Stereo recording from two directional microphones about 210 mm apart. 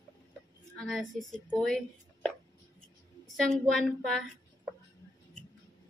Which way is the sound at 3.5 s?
Centre (ahead or behind).